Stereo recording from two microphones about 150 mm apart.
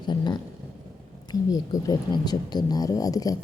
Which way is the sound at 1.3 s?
25° left (ahead or behind).